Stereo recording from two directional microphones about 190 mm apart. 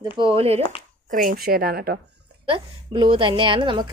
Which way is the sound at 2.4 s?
25° right (ahead or behind).